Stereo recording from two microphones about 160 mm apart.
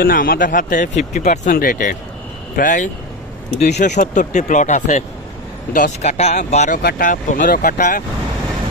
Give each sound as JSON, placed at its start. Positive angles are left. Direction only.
{"t": 0.0, "sound": "speech", "side_deg": 65}
{"t": 1.5, "sound": "speech", "side_deg": 65}
{"t": 6.8, "sound": "speech", "side_deg": 65}